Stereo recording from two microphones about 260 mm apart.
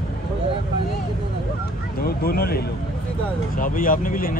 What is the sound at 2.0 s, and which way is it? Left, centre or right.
Speech, left.